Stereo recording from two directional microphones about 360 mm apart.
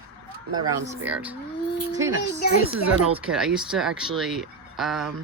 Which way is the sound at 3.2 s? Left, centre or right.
Centre.